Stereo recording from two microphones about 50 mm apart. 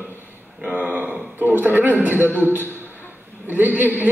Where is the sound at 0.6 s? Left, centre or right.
Right.